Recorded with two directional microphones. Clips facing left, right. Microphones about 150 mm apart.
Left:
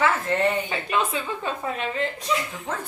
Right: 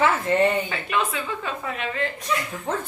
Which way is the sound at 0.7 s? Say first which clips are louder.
Left 1 dB; 30° left (ahead or behind).